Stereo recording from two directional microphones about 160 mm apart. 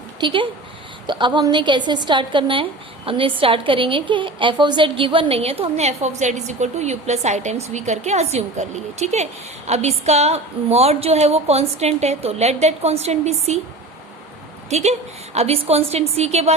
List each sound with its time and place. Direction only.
0.2 s a woman's voice: 30° right (ahead or behind)
14.7 s a woman's voice: 45° right (ahead or behind)